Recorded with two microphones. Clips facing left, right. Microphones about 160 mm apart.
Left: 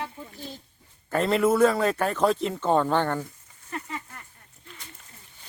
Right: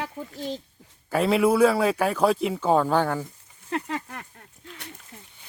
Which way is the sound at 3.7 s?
85° right.